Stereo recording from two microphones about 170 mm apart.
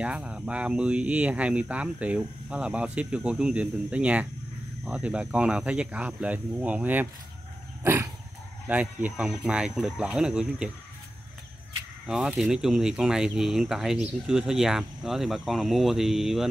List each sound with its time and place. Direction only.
0.0 s speech: 5° right (ahead or behind)
7.8 s dog: 15° right (ahead or behind)
8.6 s speech: 10° right (ahead or behind)
12.1 s speech: 5° right (ahead or behind)